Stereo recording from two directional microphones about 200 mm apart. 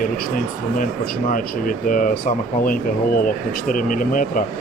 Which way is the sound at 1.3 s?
45° left (ahead or behind).